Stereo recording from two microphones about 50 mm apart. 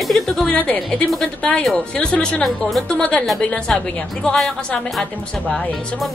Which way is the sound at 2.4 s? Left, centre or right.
Centre.